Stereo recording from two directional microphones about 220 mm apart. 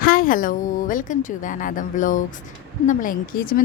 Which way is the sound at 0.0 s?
40° left (ahead or behind).